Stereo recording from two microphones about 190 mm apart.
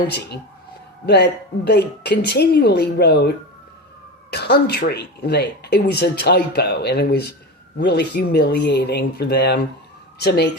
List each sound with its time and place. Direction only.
1.0 s speech: 60° left (ahead or behind)